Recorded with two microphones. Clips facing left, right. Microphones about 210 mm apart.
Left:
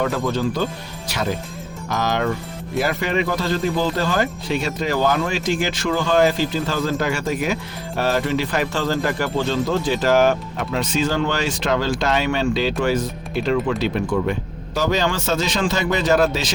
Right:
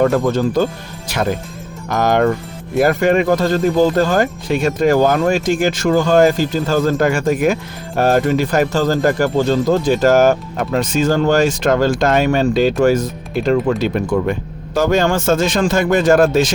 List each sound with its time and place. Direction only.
0.0 s speech: 45° right (ahead or behind)